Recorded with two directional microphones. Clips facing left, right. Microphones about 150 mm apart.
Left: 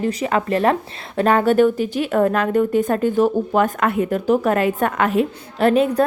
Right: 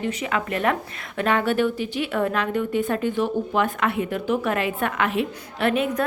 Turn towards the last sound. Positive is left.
turn(degrees=35)  # may be behind; listen again after turning